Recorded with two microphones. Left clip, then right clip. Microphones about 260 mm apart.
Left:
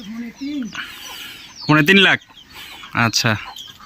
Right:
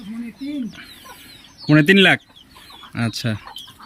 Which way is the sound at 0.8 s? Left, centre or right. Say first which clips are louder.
Left 9 dB; centre.